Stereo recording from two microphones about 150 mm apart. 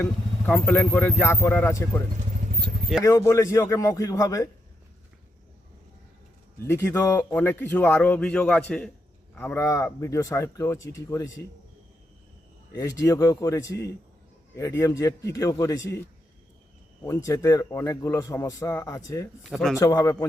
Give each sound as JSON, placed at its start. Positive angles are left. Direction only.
{"t": 0.0, "sound": "speech", "side_deg": 10}
{"t": 3.0, "sound": "a man's voice", "side_deg": 20}
{"t": 6.6, "sound": "a man's voice", "side_deg": 15}
{"t": 12.7, "sound": "a man's voice", "side_deg": 25}
{"t": 19.4, "sound": "speech", "side_deg": 0}
{"t": 19.8, "sound": "a man's voice", "side_deg": 25}